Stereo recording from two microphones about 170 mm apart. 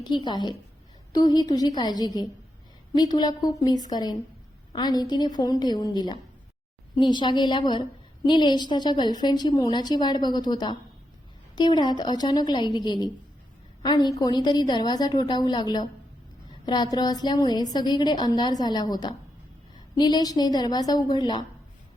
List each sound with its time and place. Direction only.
0.0 s a woman's voice: 25° left (ahead or behind)